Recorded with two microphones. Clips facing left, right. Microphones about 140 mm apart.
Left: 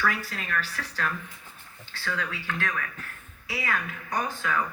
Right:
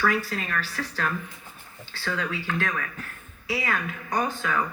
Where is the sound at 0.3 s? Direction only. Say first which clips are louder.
Right 2 dB; 30° right (ahead or behind).